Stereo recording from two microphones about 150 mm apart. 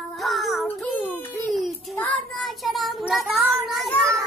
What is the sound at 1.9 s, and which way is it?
Child singing, 10° left (ahead or behind).